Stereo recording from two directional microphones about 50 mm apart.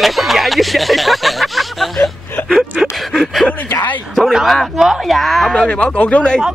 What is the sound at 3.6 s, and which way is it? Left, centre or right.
Speech, left.